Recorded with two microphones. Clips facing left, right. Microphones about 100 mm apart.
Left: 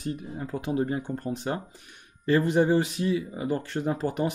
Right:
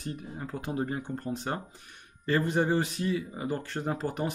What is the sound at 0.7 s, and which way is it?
Speech, 10° left (ahead or behind).